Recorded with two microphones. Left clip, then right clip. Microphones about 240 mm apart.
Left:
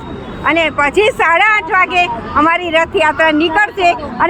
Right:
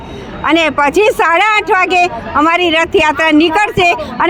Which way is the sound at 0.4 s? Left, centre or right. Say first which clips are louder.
Right 2 dB; right.